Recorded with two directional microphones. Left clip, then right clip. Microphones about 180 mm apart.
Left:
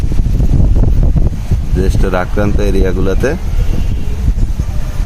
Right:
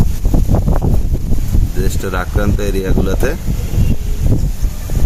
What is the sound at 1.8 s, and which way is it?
Speech, 40° left (ahead or behind).